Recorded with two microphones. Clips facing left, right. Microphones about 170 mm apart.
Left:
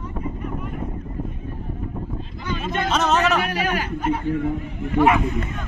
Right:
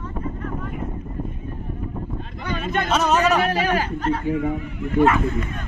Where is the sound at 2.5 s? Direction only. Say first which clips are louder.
Right 1 dB; 60° right (ahead or behind).